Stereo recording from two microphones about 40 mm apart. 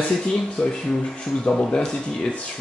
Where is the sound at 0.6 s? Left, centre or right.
Centre.